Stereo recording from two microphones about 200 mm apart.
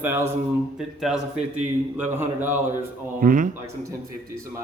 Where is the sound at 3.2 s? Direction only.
40° right (ahead or behind).